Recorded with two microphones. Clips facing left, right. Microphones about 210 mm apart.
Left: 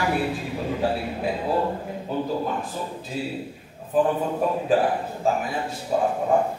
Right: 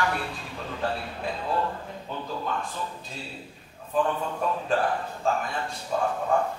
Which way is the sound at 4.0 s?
15° left (ahead or behind).